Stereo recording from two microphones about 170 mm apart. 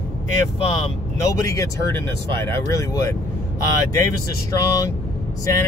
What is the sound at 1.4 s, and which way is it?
Speech, 20° left (ahead or behind).